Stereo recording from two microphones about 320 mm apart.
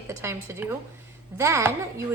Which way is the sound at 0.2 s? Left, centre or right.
Centre.